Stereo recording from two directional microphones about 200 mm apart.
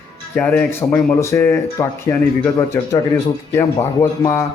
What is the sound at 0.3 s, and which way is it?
Speech, 10° left (ahead or behind).